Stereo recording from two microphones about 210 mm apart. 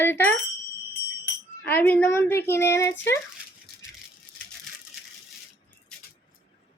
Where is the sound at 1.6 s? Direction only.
10° left (ahead or behind).